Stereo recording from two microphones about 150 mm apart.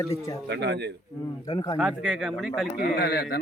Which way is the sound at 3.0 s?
90° left.